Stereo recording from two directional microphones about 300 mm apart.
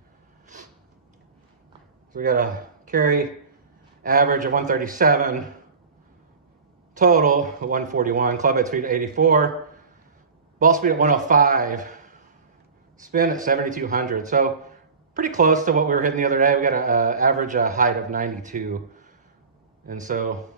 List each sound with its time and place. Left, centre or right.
2.1 s a man's voice: right
6.9 s a man's voice: right
10.6 s a man's voice: right